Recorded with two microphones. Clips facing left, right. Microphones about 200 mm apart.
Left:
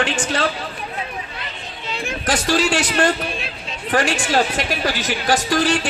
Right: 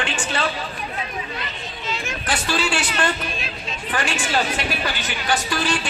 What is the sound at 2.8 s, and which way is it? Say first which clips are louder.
Speech: left 5 dB; 40° left (ahead or behind).